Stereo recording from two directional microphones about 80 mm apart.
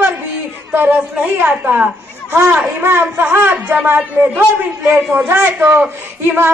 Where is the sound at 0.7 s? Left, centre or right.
Right.